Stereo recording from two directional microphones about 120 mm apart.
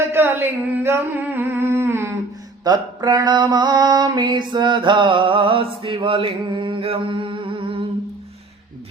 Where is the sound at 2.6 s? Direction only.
35° right (ahead or behind).